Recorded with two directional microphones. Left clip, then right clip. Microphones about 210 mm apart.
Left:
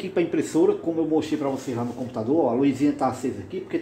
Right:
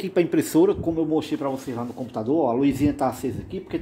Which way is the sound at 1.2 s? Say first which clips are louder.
Left 1 dB; 45° right (ahead or behind).